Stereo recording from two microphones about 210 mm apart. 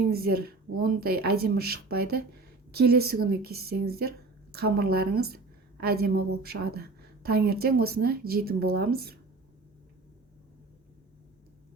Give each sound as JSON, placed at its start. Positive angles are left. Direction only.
{"t": 0.1, "sound": "a woman's voice", "side_deg": -45}